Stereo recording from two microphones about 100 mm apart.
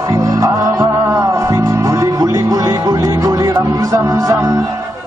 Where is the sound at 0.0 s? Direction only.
35° right (ahead or behind).